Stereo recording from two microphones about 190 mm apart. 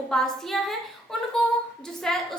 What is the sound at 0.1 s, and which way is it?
Speech, centre (ahead or behind).